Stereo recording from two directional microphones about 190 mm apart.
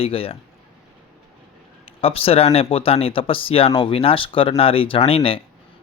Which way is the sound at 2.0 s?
30° left (ahead or behind).